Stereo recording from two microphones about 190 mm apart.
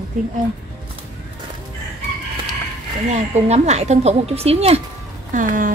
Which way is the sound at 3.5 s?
35° right (ahead or behind).